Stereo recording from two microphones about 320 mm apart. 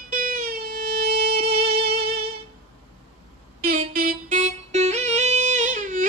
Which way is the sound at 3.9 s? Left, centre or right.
Right.